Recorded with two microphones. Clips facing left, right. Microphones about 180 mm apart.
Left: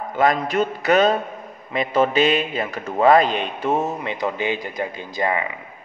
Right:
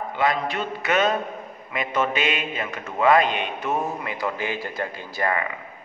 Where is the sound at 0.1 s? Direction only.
45° left (ahead or behind); by 5.5 s 20° left (ahead or behind).